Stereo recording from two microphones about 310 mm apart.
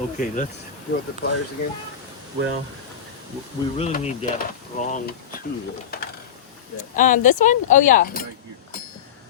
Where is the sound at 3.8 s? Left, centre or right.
Left.